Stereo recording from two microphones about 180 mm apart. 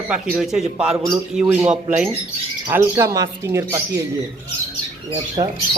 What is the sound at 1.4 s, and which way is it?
Speech, 15° right (ahead or behind).